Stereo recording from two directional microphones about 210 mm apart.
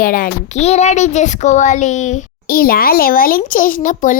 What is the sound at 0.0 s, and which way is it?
A child's voice, 40° left (ahead or behind).